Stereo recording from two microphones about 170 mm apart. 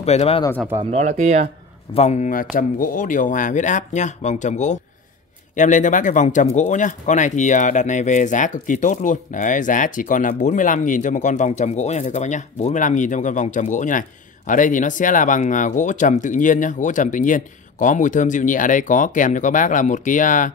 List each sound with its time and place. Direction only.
0.0 s speech: 40° left (ahead or behind)
0.7 s speech: 40° right (ahead or behind)
2.0 s speech: 45° left (ahead or behind)